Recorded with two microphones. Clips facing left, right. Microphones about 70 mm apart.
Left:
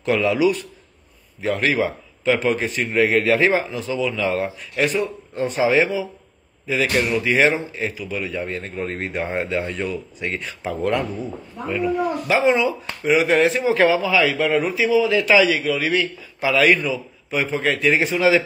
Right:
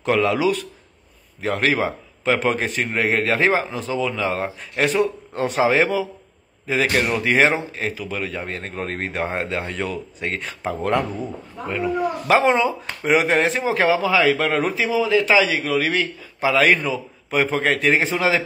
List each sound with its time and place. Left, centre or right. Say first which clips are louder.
0.0 s a man's voice: right 1 dB; right
1.4 s a man's voice: even; right
2.8 s a man's voice: left 4 dB; right
5.0 s a man's voice: right 1 dB; right
5.7 s a man's voice: even; right
9.1 s speech: left 2 dB; right
9.8 s a man's voice: even; right
12.3 s a man's voice: right 1 dB; right
13.7 s speech: left 1 dB; right
14.3 s a man's voice: left 1 dB; right
15.6 s a man's voice: even; right
16.9 s a man's voice: right 2 dB; right
17.9 s a man's voice: left 2 dB; right